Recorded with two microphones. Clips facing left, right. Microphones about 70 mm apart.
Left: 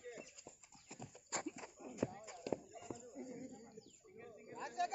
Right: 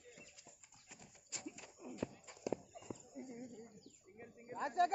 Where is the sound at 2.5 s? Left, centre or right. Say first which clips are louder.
Even; centre.